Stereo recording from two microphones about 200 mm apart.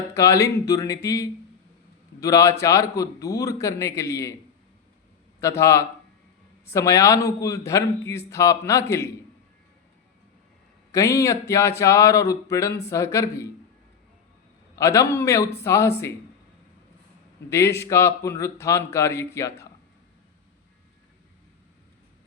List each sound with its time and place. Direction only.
0.1 s a man's voice: 15° left (ahead or behind)
5.4 s a man's voice: 15° left (ahead or behind)
10.9 s a man's voice: 15° left (ahead or behind)
14.8 s a man's voice: 15° left (ahead or behind)
17.5 s a man's voice: 15° left (ahead or behind)